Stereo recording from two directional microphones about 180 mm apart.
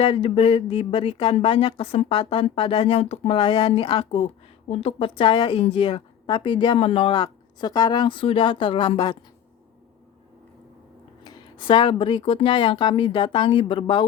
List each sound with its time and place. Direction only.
0.0 s a woman's voice: 30° left (ahead or behind)
11.2 s a woman's voice: 25° left (ahead or behind)